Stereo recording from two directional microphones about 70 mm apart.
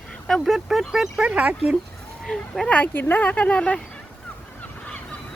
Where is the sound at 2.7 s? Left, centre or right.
Left.